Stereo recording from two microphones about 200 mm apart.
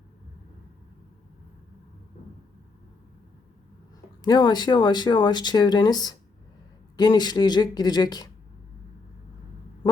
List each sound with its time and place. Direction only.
4.2 s speech: 20° left (ahead or behind)